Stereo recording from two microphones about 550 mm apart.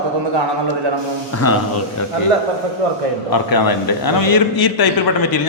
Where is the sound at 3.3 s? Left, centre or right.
Left.